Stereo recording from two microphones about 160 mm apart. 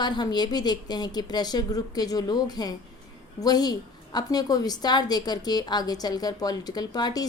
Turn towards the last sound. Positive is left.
turn(degrees=25)  # may be behind; listen again after turning